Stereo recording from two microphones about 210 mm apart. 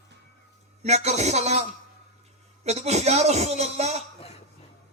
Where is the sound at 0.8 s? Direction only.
30° right (ahead or behind).